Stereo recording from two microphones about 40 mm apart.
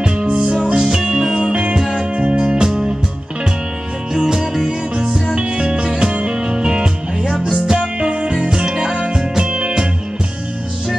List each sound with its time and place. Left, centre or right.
0.0 s music: right
1.8 s music: centre
2.1 s music: right
4.1 s music: centre